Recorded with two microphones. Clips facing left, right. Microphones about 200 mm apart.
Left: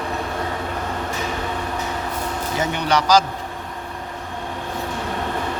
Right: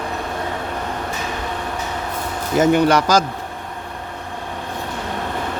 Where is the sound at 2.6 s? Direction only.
50° right (ahead or behind).